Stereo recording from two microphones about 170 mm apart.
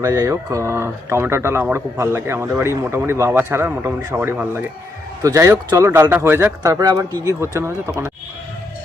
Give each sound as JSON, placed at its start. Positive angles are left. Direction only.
{"t": 0.0, "sound": "speech", "side_deg": -20}